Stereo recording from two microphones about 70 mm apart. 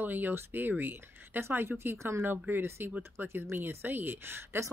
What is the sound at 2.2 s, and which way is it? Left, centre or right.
Speech, right.